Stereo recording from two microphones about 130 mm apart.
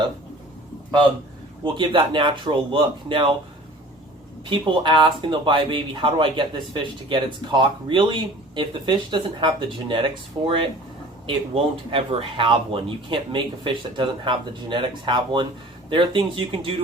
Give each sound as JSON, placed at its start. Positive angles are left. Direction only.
{"t": 1.6, "sound": "speech", "side_deg": -40}
{"t": 4.4, "sound": "speech", "side_deg": -40}